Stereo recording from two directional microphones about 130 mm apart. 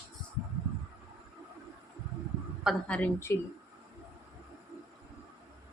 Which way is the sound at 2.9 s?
15° left (ahead or behind).